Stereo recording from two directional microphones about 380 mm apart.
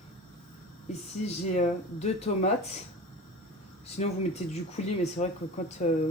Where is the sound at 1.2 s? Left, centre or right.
Centre.